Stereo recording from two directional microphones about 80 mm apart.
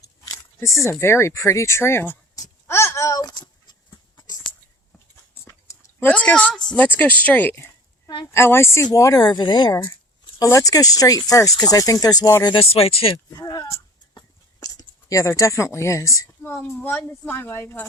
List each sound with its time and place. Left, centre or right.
0.3 s speech: left
2.6 s babbling: left
6.0 s a woman's voice: centre
8.9 s speech: left
9.2 s speech: left
10.4 s speech: left
13.4 s speech: left
13.7 s a sound: left
14.2 s a sound: left
16.4 s a woman's voice: left